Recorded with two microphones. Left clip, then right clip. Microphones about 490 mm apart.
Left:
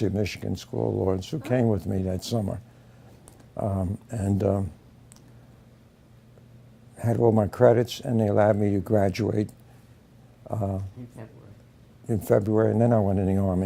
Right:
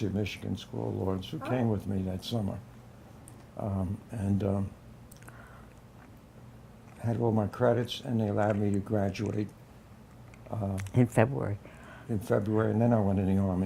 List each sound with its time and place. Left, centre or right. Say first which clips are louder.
0.0 s speech: left 7 dB; left
3.6 s speech: left 7 dB; left
7.0 s speech: left 8 dB; left
10.5 s speech: left 6 dB; left
12.0 s speech: left 7 dB; left